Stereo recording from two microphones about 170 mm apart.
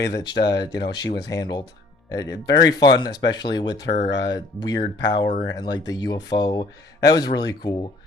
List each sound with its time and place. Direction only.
0.0 s speech: 25° left (ahead or behind)
4.1 s speech: 90° left
4.4 s speech: 25° left (ahead or behind)